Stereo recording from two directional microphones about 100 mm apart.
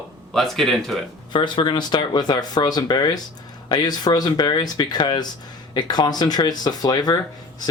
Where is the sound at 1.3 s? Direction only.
50° left (ahead or behind).